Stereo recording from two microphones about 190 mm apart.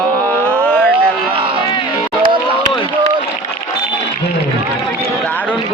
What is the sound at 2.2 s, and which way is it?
Run, 25° right (ahead or behind).